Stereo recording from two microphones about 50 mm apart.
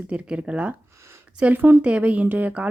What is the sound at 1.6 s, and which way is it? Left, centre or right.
Speech, right.